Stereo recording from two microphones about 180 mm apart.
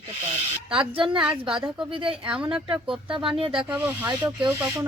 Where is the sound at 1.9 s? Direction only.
30° right (ahead or behind).